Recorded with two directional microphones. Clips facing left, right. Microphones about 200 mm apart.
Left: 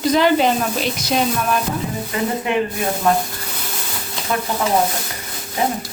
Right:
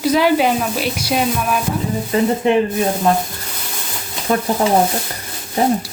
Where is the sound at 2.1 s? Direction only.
30° right (ahead or behind).